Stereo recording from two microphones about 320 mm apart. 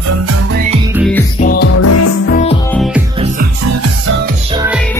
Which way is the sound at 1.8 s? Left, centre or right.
Left.